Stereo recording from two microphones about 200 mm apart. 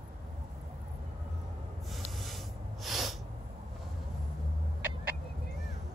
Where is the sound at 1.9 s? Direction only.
Centre (ahead or behind).